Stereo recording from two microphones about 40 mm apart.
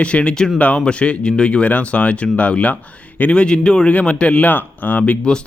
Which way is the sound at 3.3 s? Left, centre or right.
Left.